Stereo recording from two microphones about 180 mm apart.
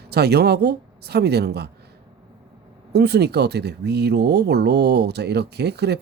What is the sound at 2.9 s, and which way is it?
Speech, 65° right (ahead or behind).